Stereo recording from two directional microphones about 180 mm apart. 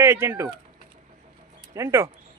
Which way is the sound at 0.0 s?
15° right (ahead or behind).